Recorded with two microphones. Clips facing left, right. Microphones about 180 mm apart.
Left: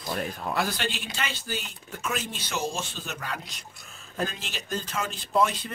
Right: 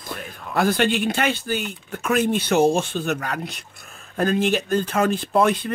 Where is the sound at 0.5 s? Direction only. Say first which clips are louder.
Right 12 dB; 55° right (ahead or behind).